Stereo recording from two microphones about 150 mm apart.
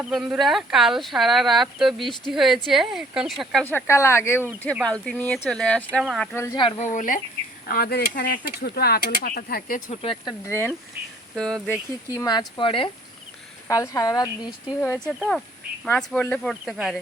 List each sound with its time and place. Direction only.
0.0 s speech: 5° right (ahead or behind)
3.6 s speech: 15° left (ahead or behind); by 6.2 s 5° right (ahead or behind)
6.3 s speech: 20° left (ahead or behind)
6.6 s speech: 40° left (ahead or behind)
6.8 s speech: 60° left (ahead or behind)
7.7 s speech: 90° left; by 9.8 s 75° left (ahead or behind)
9.9 s speech: 40° left (ahead or behind)
12.1 s speech: 25° left (ahead or behind)
13.7 s speech: 20° left (ahead or behind)
15.0 s speech: 5° left (ahead or behind)